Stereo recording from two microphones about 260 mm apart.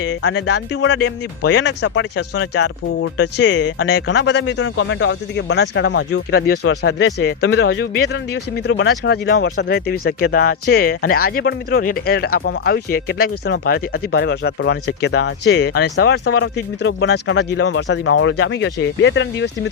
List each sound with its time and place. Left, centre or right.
0.2 s speech: left